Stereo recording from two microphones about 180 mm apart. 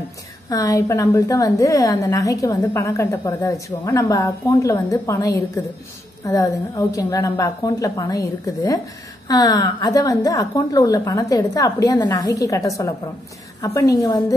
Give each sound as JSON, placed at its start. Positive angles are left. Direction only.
{"t": 0.5, "sound": "a woman's voice", "side_deg": 20}